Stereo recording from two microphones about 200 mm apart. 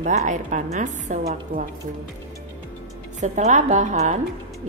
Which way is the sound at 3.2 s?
35° right (ahead or behind).